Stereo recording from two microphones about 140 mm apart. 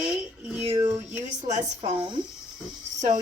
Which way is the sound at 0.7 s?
35° right (ahead or behind).